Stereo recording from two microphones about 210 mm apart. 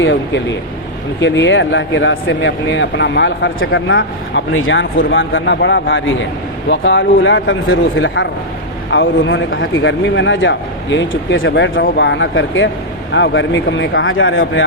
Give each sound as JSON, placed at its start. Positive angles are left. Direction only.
{"t": 0.0, "sound": "a man's voice", "side_deg": 60}